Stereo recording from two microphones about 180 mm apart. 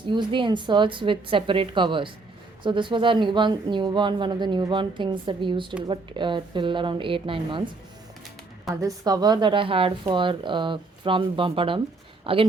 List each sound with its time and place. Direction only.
0.1 s speech: 25° right (ahead or behind)
8.8 s a woman's voice: 20° right (ahead or behind)